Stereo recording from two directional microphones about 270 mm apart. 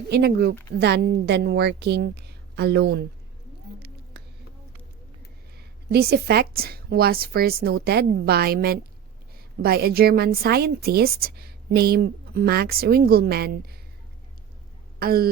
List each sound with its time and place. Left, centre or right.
0.1 s a woman's voice: right
5.5 s a woman's voice: right
14.9 s speech: right